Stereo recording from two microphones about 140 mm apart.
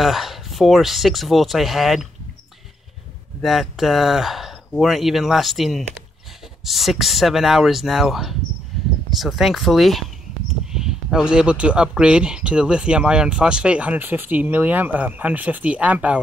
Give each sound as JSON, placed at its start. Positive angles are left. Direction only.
{"t": 0.0, "sound": "speech", "side_deg": 0}
{"t": 3.4, "sound": "speech", "side_deg": 0}